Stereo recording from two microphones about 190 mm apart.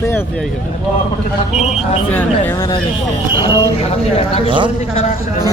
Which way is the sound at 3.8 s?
30° left (ahead or behind).